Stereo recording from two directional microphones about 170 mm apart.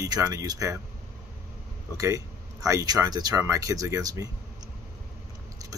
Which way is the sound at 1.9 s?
20° right (ahead or behind).